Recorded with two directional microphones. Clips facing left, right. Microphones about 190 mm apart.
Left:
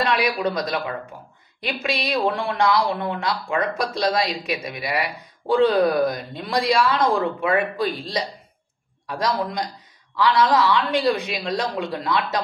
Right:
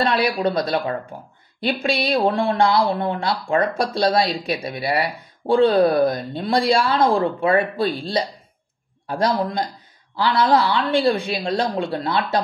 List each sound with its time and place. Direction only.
0.0 s speech: 30° right (ahead or behind)